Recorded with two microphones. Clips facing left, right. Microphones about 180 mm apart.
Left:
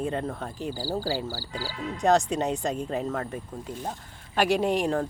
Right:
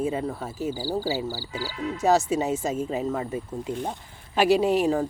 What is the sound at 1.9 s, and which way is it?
Speech, 5° right (ahead or behind).